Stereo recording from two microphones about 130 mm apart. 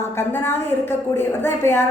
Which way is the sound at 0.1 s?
20° left (ahead or behind).